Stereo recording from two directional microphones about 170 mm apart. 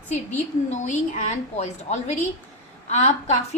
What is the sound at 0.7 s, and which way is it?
A woman's voice, 45° left (ahead or behind).